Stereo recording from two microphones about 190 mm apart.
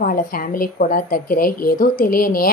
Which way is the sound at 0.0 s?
45° left (ahead or behind).